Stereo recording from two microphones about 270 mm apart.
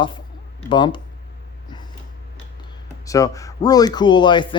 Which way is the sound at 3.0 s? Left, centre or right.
Centre.